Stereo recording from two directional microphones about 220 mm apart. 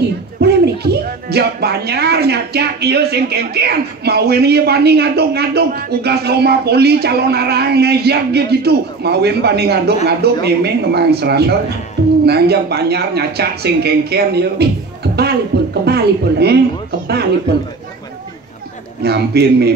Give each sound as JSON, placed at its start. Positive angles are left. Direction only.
{"t": 0.4, "sound": "speech", "side_deg": -45}
{"t": 15.8, "sound": "speech", "side_deg": -50}
{"t": 19.0, "sound": "speech", "side_deg": -45}